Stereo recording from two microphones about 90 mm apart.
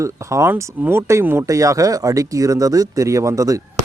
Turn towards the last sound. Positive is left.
turn(degrees=-40)  # may be behind; listen again after turning